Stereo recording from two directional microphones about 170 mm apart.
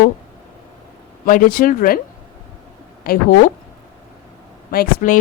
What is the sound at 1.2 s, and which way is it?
Speech, 55° left (ahead or behind).